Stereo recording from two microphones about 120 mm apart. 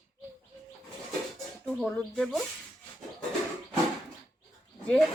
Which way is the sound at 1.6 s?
5° left (ahead or behind).